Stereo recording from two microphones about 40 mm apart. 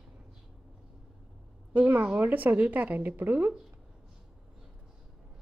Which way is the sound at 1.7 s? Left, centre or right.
Right.